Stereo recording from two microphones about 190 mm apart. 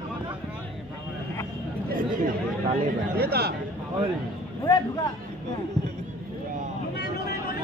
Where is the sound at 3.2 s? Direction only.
55° right (ahead or behind).